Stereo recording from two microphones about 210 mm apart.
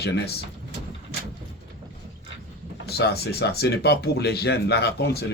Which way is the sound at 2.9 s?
50° left (ahead or behind).